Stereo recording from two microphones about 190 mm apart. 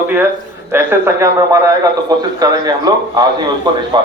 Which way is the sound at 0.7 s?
10° right (ahead or behind).